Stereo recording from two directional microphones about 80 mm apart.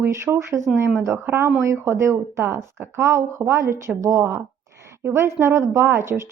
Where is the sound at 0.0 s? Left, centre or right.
Right.